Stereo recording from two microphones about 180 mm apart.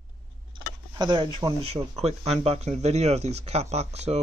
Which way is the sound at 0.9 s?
25° right (ahead or behind).